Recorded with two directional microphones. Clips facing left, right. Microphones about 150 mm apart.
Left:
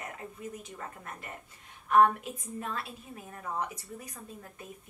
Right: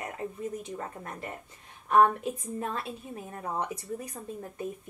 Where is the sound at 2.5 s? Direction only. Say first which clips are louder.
Right 4 dB; 35° right (ahead or behind).